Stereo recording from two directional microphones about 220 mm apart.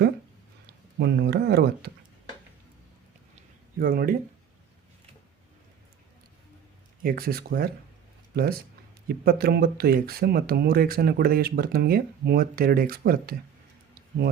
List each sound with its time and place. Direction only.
0.9 s speech: 50° right (ahead or behind)
3.3 s a sound: 40° right (ahead or behind)
7.0 s speech: 45° right (ahead or behind)
9.0 s speech: 45° right (ahead or behind)